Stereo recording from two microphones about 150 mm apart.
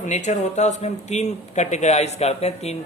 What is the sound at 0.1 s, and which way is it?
Speech, 50° left (ahead or behind).